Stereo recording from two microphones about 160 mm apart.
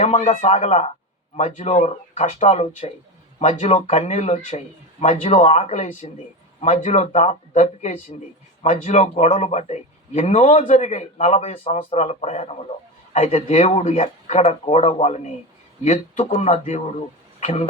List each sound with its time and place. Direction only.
0.0 s speech: 45° left (ahead or behind)